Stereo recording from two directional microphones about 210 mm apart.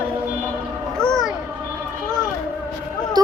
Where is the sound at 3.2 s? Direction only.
20° right (ahead or behind).